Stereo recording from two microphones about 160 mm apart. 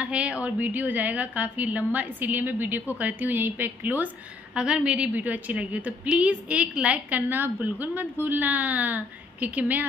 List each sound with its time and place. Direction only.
0.0 s a woman's voice: 5° right (ahead or behind)